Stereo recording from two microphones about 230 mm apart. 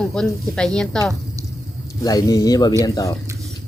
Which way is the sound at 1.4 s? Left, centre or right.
Centre.